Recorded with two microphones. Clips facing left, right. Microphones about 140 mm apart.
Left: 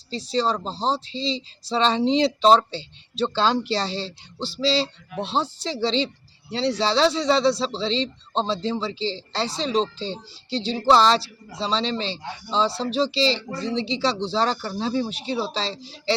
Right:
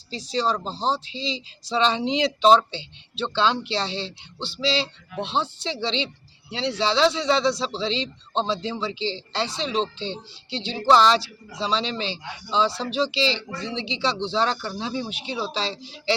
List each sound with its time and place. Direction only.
0.1 s speech: 30° left (ahead or behind)
0.6 s speech: centre (ahead or behind)
0.9 s speech: 30° left (ahead or behind)